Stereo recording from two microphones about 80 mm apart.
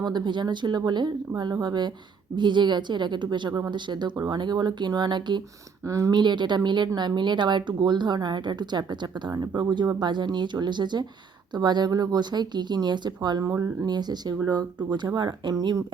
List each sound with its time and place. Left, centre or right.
0.0 s speech: right
5.8 s speech: right
6.1 s speech: right
9.3 s speech: right